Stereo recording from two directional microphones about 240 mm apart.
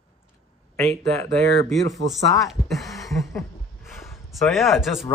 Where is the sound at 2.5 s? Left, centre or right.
Centre.